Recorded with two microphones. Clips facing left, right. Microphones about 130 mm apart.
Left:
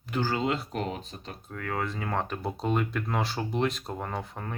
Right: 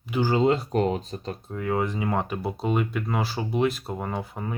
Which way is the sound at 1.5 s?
20° right (ahead or behind).